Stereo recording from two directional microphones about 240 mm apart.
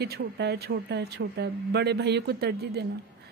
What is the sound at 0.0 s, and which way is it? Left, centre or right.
Speech, right.